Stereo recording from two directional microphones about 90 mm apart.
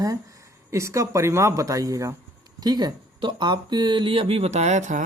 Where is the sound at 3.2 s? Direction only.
65° right (ahead or behind); by 4.4 s 90° right.